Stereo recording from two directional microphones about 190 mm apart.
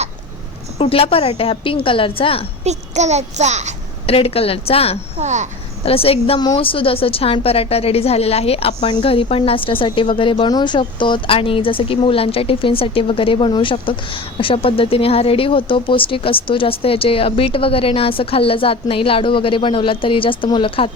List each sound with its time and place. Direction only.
0.8 s a woman's voice: 30° left (ahead or behind)
2.6 s a child's voice: 35° right (ahead or behind)
4.0 s speech: 30° left (ahead or behind)
5.1 s a child's voice: 40° right (ahead or behind)
5.8 s a woman's voice: 30° left (ahead or behind)